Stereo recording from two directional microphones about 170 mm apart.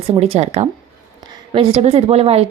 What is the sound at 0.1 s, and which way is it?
Speech, 40° right (ahead or behind).